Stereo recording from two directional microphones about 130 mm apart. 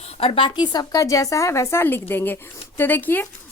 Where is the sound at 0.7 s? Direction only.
30° left (ahead or behind).